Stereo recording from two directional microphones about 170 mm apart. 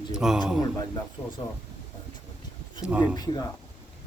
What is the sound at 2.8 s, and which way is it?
Speech, 5° right (ahead or behind).